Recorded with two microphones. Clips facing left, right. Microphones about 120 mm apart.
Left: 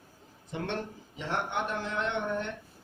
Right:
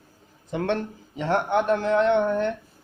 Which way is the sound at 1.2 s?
60° right (ahead or behind).